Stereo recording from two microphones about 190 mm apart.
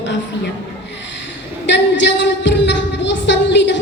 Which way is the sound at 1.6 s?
70° left (ahead or behind).